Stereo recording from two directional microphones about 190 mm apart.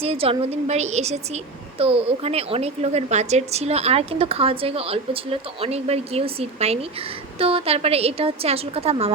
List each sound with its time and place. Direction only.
0.0 s a woman's voice: 30° right (ahead or behind)